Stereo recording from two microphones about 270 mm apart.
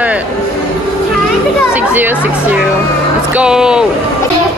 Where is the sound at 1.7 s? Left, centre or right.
Centre.